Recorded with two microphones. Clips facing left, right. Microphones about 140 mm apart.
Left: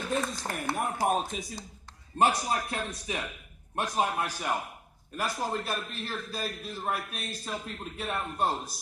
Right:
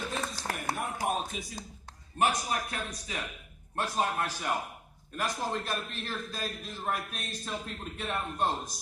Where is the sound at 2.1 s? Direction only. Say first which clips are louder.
Left 3 dB; 30° left (ahead or behind).